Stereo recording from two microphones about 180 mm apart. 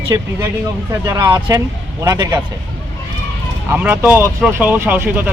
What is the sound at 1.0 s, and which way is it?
Speech, 20° right (ahead or behind).